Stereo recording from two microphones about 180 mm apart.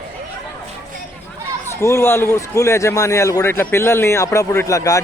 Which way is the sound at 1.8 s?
15° left (ahead or behind).